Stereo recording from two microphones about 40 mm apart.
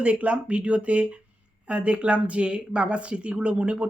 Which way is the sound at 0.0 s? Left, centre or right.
Right.